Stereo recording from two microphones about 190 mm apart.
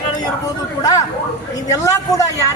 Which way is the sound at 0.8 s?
20° left (ahead or behind).